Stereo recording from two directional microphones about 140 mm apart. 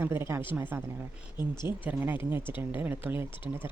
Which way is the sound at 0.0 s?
15° right (ahead or behind).